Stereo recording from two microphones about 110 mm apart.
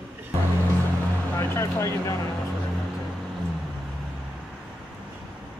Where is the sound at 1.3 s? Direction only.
25° left (ahead or behind).